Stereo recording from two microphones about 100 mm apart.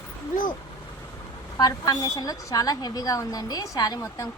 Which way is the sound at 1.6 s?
40° left (ahead or behind).